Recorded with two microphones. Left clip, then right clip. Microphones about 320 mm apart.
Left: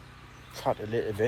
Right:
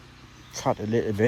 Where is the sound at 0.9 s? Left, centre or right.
Right.